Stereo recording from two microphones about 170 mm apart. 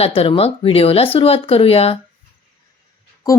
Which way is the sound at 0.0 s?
35° left (ahead or behind).